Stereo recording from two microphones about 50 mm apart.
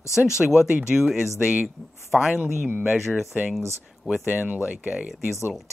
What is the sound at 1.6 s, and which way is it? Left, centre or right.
Speech, centre.